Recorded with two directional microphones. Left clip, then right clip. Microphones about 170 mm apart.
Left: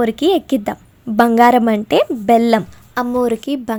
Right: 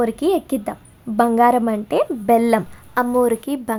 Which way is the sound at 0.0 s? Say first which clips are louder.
Left 4 dB; 25° left (ahead or behind).